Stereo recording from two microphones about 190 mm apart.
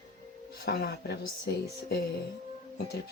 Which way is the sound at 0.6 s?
55° left (ahead or behind).